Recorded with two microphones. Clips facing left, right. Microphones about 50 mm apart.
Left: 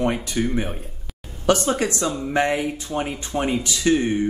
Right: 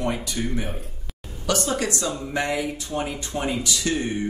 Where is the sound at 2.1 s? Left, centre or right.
Centre.